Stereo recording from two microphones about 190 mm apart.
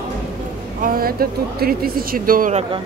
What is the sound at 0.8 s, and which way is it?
Speech, 50° right (ahead or behind).